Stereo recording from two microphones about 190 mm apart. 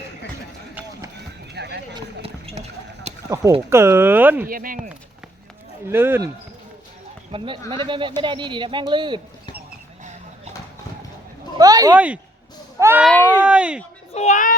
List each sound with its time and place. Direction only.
1.5 s run: 60° right (ahead or behind)
2.2 s a sound: 35° right (ahead or behind)
3.2 s speech: 15° right (ahead or behind)
4.4 s speech: 45° right (ahead or behind)
5.9 s speech: 10° right (ahead or behind)
7.3 s speech: 25° right (ahead or behind)
11.5 s speech: 20° right (ahead or behind)
11.9 s speech: 5° right (ahead or behind)
13.1 s speech: 10° left (ahead or behind)
13.4 s speech: 5° right (ahead or behind)
14.1 s a child's voice: 35° left (ahead or behind)